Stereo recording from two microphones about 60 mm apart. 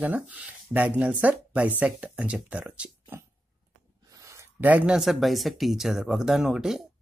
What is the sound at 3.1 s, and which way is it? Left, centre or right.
Dog, right.